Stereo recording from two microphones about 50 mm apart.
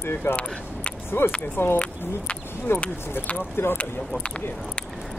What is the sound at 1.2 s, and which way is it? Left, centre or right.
Speech, left.